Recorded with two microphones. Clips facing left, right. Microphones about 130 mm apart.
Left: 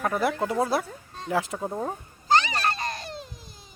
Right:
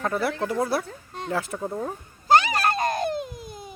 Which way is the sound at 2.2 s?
50° right (ahead or behind).